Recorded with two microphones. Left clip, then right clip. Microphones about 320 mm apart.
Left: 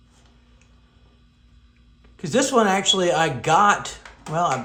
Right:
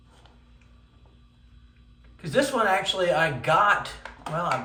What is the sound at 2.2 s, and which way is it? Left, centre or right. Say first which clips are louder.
A man's voice: left 4 dB; left.